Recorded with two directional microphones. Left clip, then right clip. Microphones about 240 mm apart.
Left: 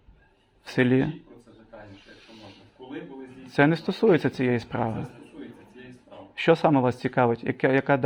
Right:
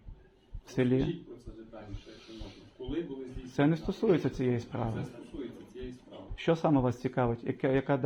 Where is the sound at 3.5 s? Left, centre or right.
Left.